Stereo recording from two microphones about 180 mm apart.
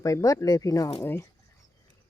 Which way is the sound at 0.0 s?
20° left (ahead or behind).